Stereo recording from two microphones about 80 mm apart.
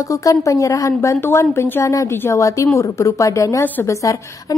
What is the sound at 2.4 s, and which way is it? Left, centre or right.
A woman's voice, left.